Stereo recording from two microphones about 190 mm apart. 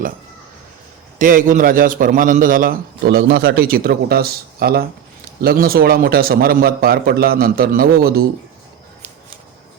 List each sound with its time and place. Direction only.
1.2 s a man's voice: 45° right (ahead or behind)